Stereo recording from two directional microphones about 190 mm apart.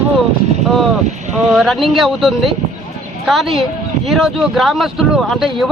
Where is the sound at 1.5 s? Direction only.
Centre (ahead or behind).